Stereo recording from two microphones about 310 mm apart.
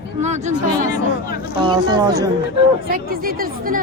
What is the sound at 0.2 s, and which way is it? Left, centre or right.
Speech, right.